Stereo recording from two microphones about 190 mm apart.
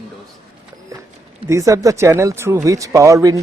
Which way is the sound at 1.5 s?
15° right (ahead or behind).